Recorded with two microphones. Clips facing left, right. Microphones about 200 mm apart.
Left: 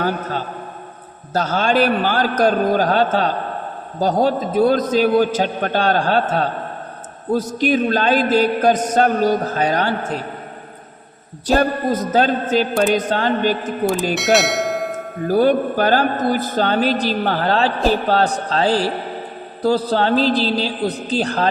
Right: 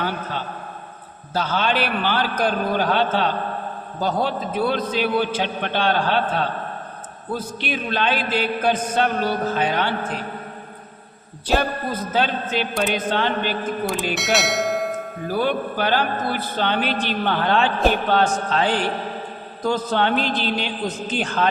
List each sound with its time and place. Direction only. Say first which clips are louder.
0.0 s a man's voice: left 5 dB; 45° left (ahead or behind)
11.4 s a man's voice: left 5 dB; 45° left (ahead or behind)
14.1 s bell: left 5 dB; centre (ahead or behind)
15.3 s a man's voice: left 8 dB; 45° left (ahead or behind)